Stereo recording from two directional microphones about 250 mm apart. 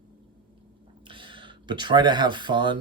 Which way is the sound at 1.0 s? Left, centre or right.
Centre.